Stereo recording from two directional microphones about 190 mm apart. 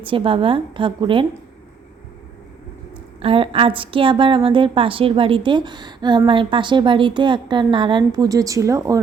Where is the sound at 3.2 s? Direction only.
30° right (ahead or behind).